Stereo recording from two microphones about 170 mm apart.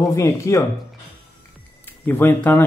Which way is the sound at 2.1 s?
10° left (ahead or behind).